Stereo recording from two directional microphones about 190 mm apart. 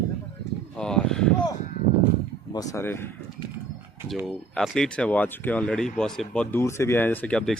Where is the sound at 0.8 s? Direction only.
5° left (ahead or behind).